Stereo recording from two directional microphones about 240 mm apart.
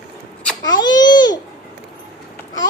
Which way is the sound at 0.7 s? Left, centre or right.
Centre.